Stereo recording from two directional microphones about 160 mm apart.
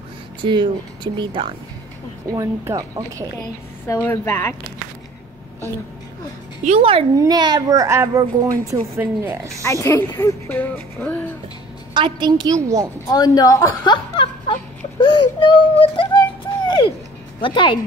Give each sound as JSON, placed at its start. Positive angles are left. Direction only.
{"t": 0.4, "sound": "speech", "side_deg": -30}
{"t": 2.3, "sound": "a child's voice", "side_deg": -20}
{"t": 3.8, "sound": "speech", "side_deg": 15}
{"t": 6.6, "sound": "speech", "side_deg": -40}
{"t": 7.2, "sound": "a child's voice", "side_deg": -25}
{"t": 9.6, "sound": "speech", "side_deg": 15}
{"t": 11.9, "sound": "a child's voice", "side_deg": -30}
{"t": 13.1, "sound": "a sound", "side_deg": 25}
{"t": 17.4, "sound": "speech", "side_deg": 30}